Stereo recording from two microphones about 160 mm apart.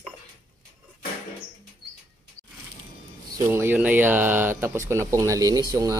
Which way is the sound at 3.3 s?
15° right (ahead or behind).